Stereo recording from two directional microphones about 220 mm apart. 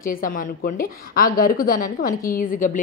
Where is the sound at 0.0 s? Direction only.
40° left (ahead or behind).